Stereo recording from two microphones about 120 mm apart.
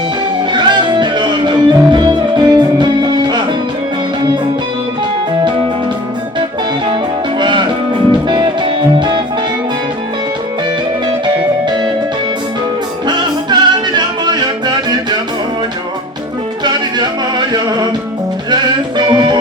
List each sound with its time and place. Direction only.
0.5 s music: 40° right (ahead or behind)
7.3 s music: 40° right (ahead or behind)
13.1 s music: 40° right (ahead or behind)
17.3 s music: 35° right (ahead or behind)